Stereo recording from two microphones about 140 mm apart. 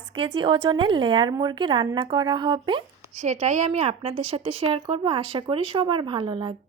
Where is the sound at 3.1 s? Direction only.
55° right (ahead or behind).